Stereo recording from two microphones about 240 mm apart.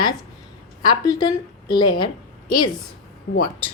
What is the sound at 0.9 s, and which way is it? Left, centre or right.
A woman's voice, centre.